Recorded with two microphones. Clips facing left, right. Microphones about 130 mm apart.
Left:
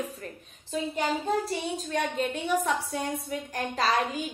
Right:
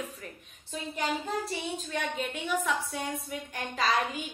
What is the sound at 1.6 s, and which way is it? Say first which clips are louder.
A woman's voice: left 4 dB; 35° left (ahead or behind).